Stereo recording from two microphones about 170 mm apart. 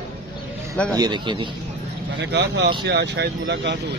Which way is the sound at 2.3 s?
85° right.